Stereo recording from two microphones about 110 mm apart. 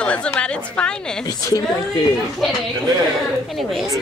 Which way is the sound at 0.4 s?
10° left (ahead or behind).